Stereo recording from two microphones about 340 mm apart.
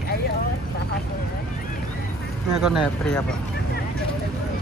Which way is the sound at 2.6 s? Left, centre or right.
Centre.